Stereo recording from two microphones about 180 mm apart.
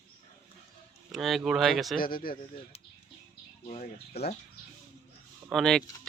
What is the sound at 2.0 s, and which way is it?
Speech, 55° left (ahead or behind).